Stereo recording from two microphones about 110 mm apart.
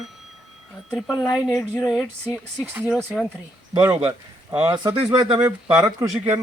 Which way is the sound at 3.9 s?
20° right (ahead or behind).